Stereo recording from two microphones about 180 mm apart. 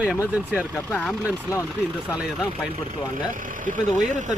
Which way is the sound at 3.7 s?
45° right (ahead or behind).